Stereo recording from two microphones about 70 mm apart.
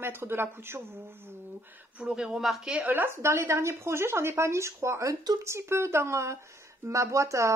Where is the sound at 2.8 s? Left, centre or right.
Right.